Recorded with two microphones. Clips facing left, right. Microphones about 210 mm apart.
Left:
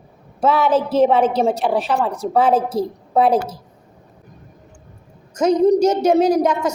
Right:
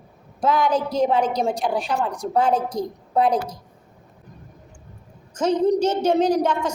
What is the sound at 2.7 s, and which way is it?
Speech, 30° left (ahead or behind).